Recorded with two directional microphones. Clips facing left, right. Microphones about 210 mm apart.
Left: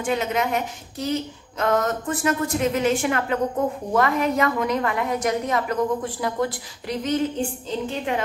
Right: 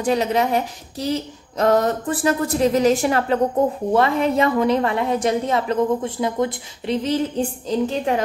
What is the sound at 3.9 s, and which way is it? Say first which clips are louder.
A woman's voice: right 2 dB; 30° right (ahead or behind).